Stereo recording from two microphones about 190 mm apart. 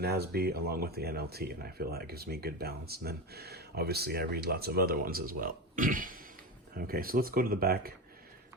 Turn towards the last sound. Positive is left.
turn(degrees=-55)  # may be behind; listen again after turning